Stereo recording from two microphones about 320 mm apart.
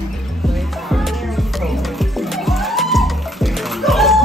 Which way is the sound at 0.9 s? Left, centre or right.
Centre.